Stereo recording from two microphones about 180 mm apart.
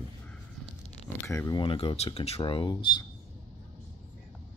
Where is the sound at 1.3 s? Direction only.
15° left (ahead or behind).